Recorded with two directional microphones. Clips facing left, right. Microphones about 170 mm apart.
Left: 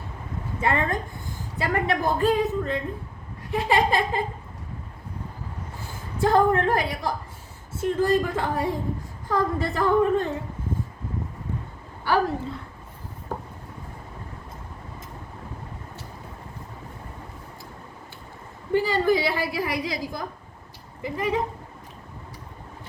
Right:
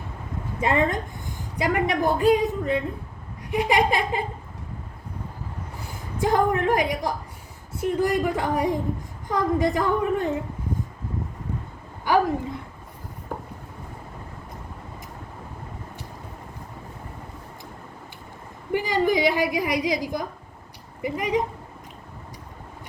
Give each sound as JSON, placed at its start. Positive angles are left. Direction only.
{"t": 0.6, "sound": "a woman's voice", "side_deg": -20}
{"t": 6.1, "sound": "a woman's voice", "side_deg": -15}
{"t": 12.0, "sound": "a woman's voice", "side_deg": -15}
{"t": 18.7, "sound": "a woman's voice", "side_deg": -15}